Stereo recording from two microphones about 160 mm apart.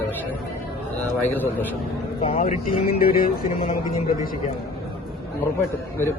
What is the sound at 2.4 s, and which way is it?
Speech, 55° left (ahead or behind).